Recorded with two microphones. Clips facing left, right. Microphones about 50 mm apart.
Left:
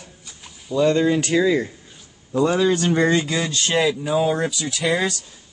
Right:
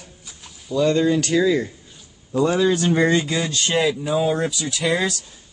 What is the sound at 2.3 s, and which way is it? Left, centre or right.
Speech, centre.